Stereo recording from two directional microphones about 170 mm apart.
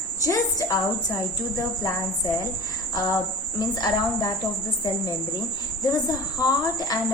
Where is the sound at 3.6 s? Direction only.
20° left (ahead or behind).